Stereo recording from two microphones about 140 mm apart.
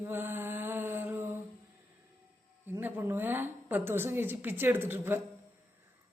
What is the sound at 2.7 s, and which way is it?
A woman's voice, 15° right (ahead or behind).